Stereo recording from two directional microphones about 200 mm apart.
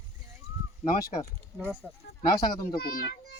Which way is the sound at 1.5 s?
10° left (ahead or behind).